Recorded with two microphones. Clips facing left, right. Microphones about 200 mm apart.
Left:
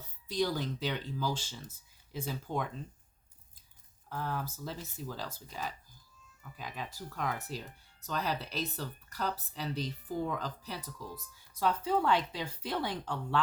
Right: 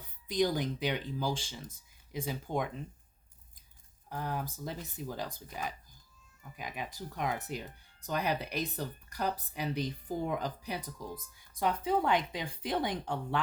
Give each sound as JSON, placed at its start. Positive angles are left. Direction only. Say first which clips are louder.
{"t": 0.0, "sound": "speech", "louder": "right 2 dB", "side_deg": -15}
{"t": 4.1, "sound": "speech", "louder": "even", "side_deg": -15}
{"t": 6.6, "sound": "speech", "louder": "right 2 dB", "side_deg": -15}